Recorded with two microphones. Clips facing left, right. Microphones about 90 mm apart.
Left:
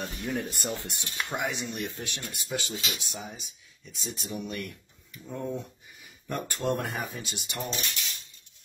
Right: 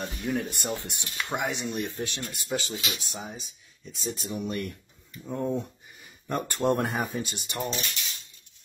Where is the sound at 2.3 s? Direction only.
35° right (ahead or behind).